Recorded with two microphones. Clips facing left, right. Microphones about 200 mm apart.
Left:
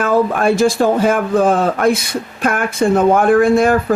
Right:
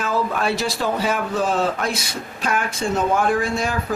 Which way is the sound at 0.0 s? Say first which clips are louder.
Left 8 dB; 50° left (ahead or behind).